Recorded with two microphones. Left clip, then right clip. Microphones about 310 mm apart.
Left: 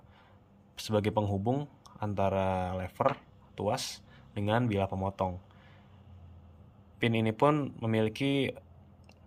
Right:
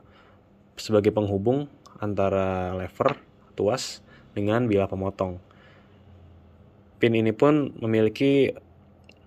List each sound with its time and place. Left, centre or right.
0.8 s speech: centre
7.0 s speech: centre